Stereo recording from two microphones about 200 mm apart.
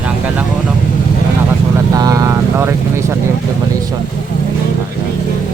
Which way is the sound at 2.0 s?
15° right (ahead or behind).